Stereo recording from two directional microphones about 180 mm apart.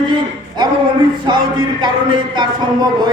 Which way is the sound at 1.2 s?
25° right (ahead or behind).